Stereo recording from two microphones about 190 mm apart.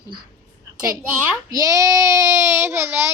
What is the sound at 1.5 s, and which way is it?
Child singing, 15° right (ahead or behind).